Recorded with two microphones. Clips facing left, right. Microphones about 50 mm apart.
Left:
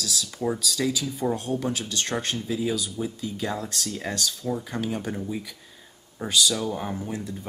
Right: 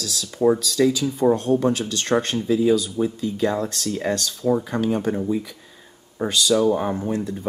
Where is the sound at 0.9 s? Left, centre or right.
Centre.